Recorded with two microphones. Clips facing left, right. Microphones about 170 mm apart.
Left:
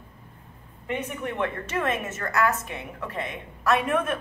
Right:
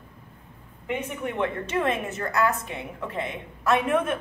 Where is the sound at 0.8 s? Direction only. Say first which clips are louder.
Right 1 dB; 20° right (ahead or behind).